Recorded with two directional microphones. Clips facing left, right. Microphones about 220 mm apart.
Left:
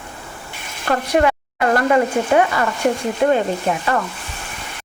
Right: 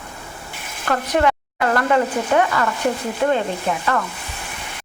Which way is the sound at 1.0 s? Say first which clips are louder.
Left 2 dB; 10° left (ahead or behind).